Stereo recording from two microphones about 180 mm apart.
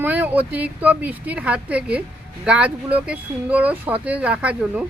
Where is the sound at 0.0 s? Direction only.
10° right (ahead or behind).